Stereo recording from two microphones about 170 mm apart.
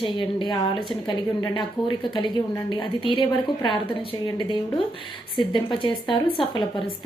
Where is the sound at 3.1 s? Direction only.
30° left (ahead or behind).